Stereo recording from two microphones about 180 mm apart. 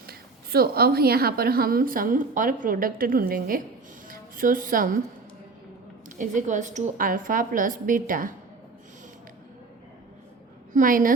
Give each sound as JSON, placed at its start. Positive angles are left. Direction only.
{"t": 0.1, "sound": "a woman's voice", "side_deg": -60}
{"t": 6.1, "sound": "a woman's voice", "side_deg": -45}
{"t": 10.7, "sound": "a woman's voice", "side_deg": -45}